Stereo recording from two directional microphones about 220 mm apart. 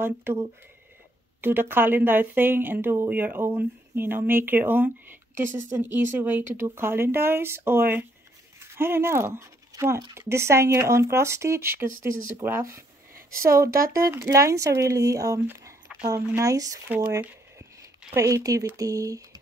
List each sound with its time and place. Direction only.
0.0 s speech: 10° right (ahead or behind)
13.7 s speech: 40° right (ahead or behind)
13.9 s speech: 15° right (ahead or behind)